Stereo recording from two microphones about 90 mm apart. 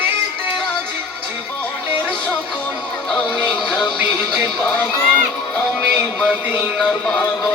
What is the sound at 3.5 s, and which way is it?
Music, centre (ahead or behind).